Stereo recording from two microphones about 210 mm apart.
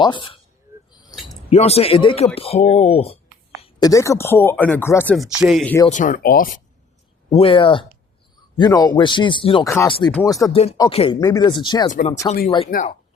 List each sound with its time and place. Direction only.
0.0 s speech: 20° left (ahead or behind)
1.5 s speech: 30° left (ahead or behind)
3.6 s speech: 20° left (ahead or behind)
5.4 s speech: centre (ahead or behind)
5.9 s speech: 35° left (ahead or behind)
7.3 s speech: 25° left (ahead or behind)
9.6 s speech: 10° left (ahead or behind)
10.5 s speech: 30° left (ahead or behind)
11.9 s speech: 35° left (ahead or behind)
12.5 s speech: 25° left (ahead or behind)
12.7 s speech: 45° left (ahead or behind)